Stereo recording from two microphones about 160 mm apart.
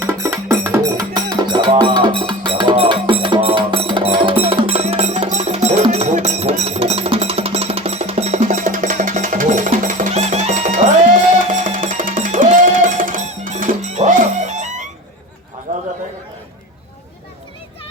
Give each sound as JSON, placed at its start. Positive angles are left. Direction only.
{"t": 0.0, "sound": "music", "side_deg": -15}